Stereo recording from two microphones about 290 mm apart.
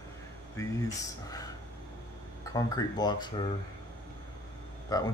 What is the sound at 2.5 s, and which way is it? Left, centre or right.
Speech, centre.